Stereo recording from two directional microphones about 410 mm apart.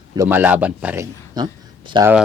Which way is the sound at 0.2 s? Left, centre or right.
Centre.